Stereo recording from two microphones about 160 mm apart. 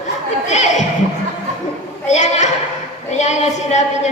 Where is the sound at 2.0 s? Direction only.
50° left (ahead or behind).